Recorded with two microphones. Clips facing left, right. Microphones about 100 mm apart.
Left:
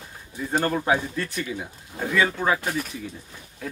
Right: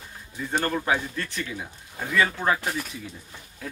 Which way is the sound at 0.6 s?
15° left (ahead or behind).